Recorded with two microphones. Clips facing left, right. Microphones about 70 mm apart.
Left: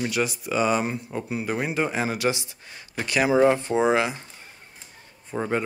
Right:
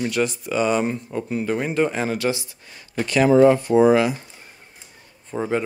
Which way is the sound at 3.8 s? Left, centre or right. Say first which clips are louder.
Right 8 dB; left.